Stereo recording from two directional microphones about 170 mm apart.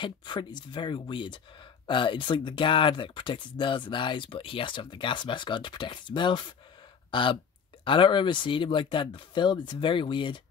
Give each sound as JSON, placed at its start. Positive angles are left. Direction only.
{"t": 0.0, "sound": "speech", "side_deg": 25}